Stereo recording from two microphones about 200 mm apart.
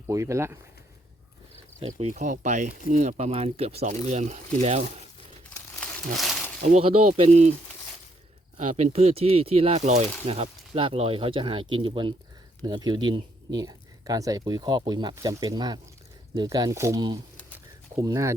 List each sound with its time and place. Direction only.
0.1 s speech: 15° right (ahead or behind)
1.8 s speech: 35° right (ahead or behind)
6.1 s a sound: centre (ahead or behind)
6.6 s speech: 35° right (ahead or behind)
8.5 s speech: 35° right (ahead or behind); by 18.3 s 15° right (ahead or behind)